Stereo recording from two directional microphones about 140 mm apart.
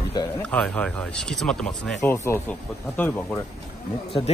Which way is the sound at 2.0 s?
15° left (ahead or behind).